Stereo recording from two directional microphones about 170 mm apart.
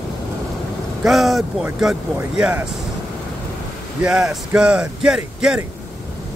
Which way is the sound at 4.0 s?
5° right (ahead or behind).